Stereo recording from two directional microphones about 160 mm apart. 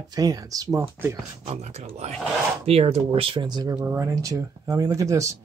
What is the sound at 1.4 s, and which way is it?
Speech, 40° right (ahead or behind).